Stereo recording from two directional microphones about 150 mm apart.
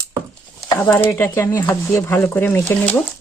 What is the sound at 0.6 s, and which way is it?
Speech, 20° left (ahead or behind).